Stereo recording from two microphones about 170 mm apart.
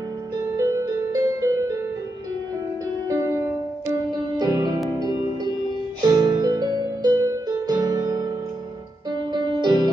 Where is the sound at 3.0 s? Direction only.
15° right (ahead or behind).